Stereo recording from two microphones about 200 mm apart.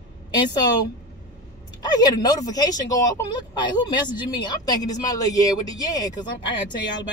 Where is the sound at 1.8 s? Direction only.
20° left (ahead or behind).